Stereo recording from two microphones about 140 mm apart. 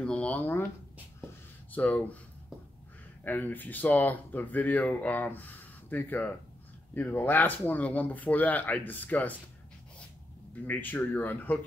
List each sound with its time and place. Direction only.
0.0 s a sound: 5° left (ahead or behind)
1.7 s speech: 10° left (ahead or behind)
3.3 s speech: 15° left (ahead or behind)
10.5 s speech: 10° left (ahead or behind)